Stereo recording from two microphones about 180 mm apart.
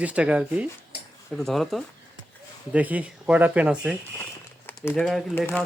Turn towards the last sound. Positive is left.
turn(degrees=5)  # may be behind; listen again after turning